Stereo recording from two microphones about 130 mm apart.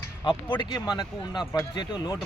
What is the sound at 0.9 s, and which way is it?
Speech, 35° left (ahead or behind).